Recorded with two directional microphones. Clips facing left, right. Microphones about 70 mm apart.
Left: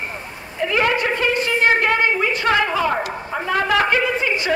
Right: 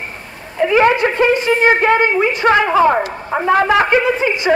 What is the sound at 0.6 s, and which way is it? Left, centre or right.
A woman's voice, centre.